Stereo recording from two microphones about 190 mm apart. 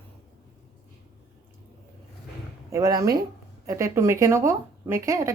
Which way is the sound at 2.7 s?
15° right (ahead or behind).